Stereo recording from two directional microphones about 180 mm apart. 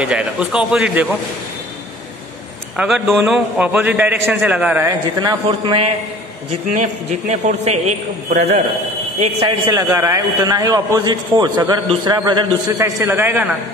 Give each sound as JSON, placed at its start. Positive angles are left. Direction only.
{"t": 0.0, "sound": "a man's voice", "side_deg": -5}
{"t": 2.8, "sound": "a man's voice", "side_deg": 0}
{"t": 5.2, "sound": "a man's voice", "side_deg": -25}
{"t": 6.7, "sound": "a man's voice", "side_deg": -40}
{"t": 9.7, "sound": "a man's voice", "side_deg": -15}